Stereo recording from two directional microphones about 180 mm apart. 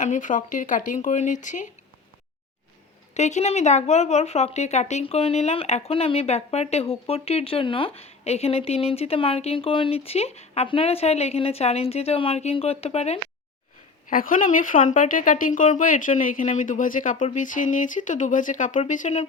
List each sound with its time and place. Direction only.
0.0 s speech: 45° left (ahead or behind)
3.2 s speech: 40° left (ahead or behind)
14.1 s speech: 50° left (ahead or behind)